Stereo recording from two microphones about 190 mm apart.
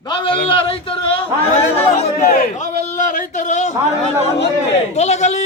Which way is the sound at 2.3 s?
50° left (ahead or behind).